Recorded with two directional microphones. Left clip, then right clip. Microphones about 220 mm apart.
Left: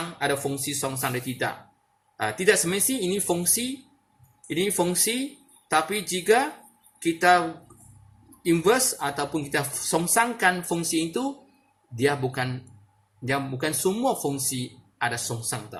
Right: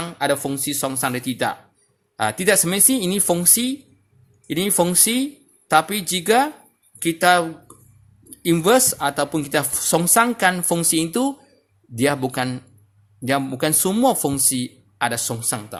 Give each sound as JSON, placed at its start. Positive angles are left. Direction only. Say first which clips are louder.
{"t": 0.0, "sound": "speech", "louder": "right 5 dB", "side_deg": -55}
{"t": 8.4, "sound": "speech", "louder": "right 5 dB", "side_deg": -55}